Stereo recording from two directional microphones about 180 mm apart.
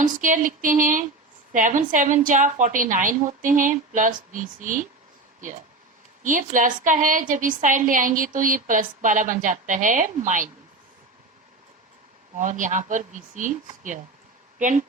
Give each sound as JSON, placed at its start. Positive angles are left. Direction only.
{"t": 0.0, "sound": "a woman's voice", "side_deg": -45}
{"t": 6.2, "sound": "a woman's voice", "side_deg": -45}
{"t": 12.3, "sound": "a woman's voice", "side_deg": -45}